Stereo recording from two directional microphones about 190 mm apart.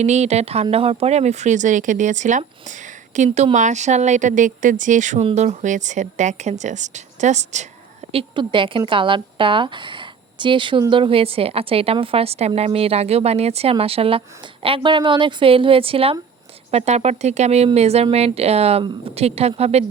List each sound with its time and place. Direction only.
0.0 s speech: 35° right (ahead or behind)
8.1 s speech: 25° right (ahead or behind)